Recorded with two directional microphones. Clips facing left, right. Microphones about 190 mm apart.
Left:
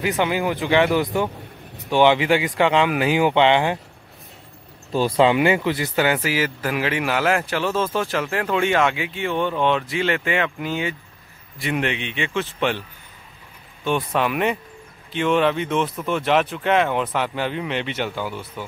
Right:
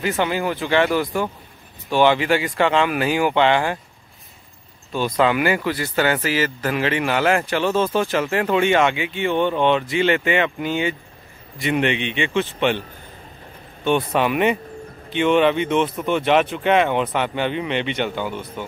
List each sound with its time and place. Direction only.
0.0 s speech: 15° left (ahead or behind)
4.9 s a man's voice: 30° left (ahead or behind); by 12.7 s centre (ahead or behind)
13.8 s a man's voice: centre (ahead or behind)